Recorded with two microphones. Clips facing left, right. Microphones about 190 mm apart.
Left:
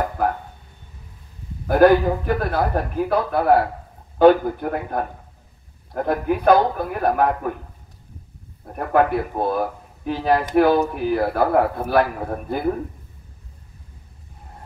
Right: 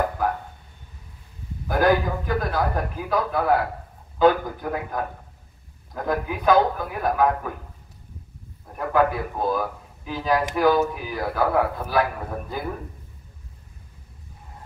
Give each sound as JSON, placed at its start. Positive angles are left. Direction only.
{"t": 1.7, "sound": "speech", "side_deg": 60}
{"t": 6.0, "sound": "speech", "side_deg": 60}
{"t": 8.7, "sound": "speech", "side_deg": 60}